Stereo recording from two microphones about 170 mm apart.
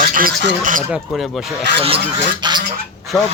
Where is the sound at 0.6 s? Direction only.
50° right (ahead or behind).